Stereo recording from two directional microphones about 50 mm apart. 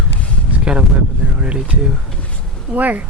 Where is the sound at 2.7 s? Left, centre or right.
Right.